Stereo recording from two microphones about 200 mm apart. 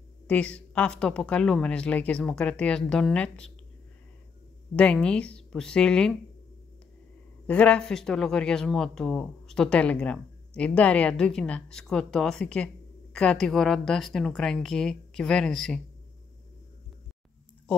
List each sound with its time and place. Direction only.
0.3 s speech: 5° left (ahead or behind)
4.7 s speech: 5° left (ahead or behind)
7.4 s speech: 5° left (ahead or behind)